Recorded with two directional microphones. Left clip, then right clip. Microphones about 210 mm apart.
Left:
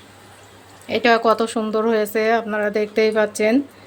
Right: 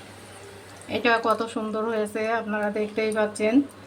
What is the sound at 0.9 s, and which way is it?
A woman's voice, 50° left (ahead or behind).